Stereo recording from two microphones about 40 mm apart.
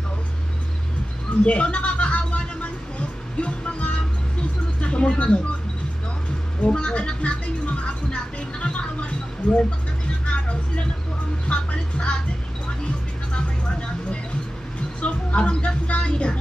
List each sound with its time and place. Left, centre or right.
1.4 s music: left
4.8 s a sound: left
6.6 s music: left